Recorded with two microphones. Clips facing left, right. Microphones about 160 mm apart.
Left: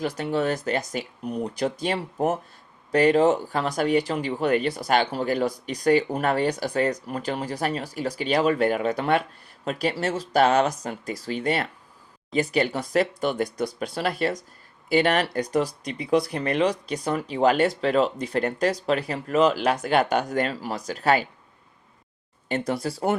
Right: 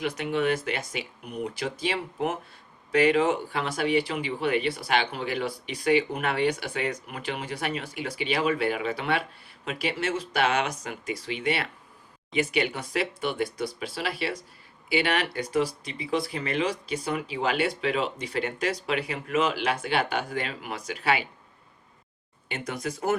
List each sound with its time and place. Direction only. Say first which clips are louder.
0.2 s speech: even; 35° left (ahead or behind)
22.4 s speech: left 6 dB; 35° left (ahead or behind)